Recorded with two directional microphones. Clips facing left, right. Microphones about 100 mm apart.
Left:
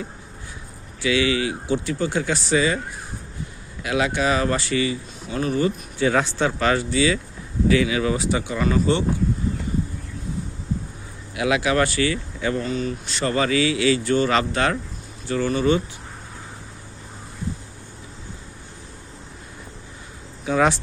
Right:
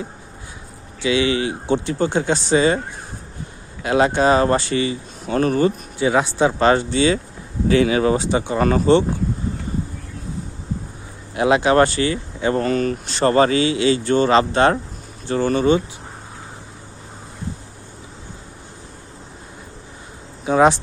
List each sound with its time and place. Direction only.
1.0 s speech: 25° right (ahead or behind)
3.8 s speech: 35° right (ahead or behind)
5.3 s speech: 50° right (ahead or behind)
6.0 s speech: 15° right (ahead or behind)
6.6 s speech: 30° right (ahead or behind)
8.5 s speech: 45° right (ahead or behind)
11.3 s speech: 35° right (ahead or behind)
12.5 s speech: 55° right (ahead or behind)
13.1 s speech: 40° right (ahead or behind)
20.4 s a sound: 25° right (ahead or behind)